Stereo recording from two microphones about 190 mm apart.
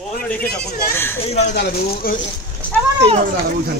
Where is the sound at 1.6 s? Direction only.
55° left (ahead or behind).